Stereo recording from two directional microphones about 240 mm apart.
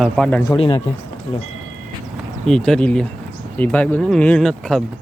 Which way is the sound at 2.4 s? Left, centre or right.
Centre.